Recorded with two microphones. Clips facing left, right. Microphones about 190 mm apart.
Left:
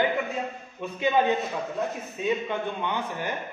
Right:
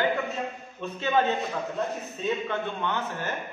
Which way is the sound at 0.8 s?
15° left (ahead or behind).